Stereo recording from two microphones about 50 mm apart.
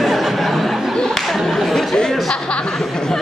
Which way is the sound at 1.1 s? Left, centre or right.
Centre.